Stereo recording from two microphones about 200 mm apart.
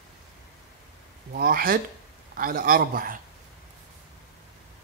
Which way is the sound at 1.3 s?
50° right (ahead or behind).